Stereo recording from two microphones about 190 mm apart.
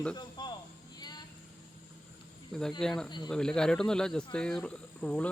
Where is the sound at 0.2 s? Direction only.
25° left (ahead or behind).